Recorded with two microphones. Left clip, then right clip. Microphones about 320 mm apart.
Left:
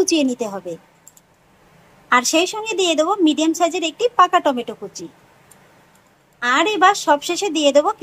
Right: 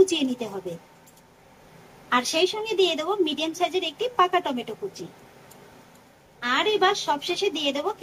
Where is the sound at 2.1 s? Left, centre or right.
Centre.